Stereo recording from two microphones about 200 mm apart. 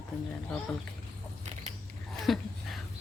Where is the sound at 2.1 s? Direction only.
Centre (ahead or behind).